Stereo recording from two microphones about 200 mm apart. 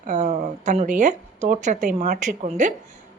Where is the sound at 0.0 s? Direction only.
35° right (ahead or behind).